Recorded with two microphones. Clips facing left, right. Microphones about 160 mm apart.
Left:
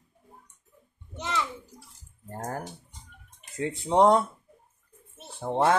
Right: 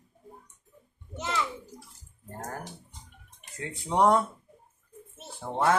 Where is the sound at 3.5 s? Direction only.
20° left (ahead or behind).